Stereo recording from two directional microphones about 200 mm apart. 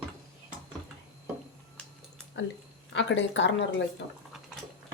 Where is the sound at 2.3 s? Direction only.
65° left (ahead or behind).